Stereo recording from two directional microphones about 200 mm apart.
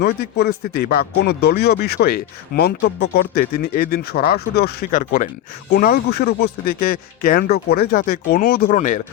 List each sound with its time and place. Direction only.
0.0 s speech: 55° left (ahead or behind)